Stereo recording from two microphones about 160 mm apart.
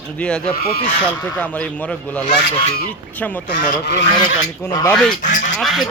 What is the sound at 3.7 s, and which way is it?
Speech, 90° left.